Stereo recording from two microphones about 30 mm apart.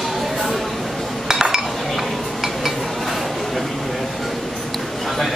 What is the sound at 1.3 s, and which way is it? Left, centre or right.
Dishes, centre.